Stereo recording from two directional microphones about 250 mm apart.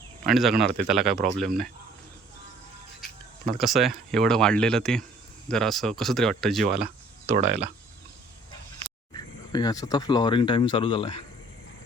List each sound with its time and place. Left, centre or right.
0.3 s speech: centre
3.6 s speech: centre
7.3 s speech: right
9.1 s speech: centre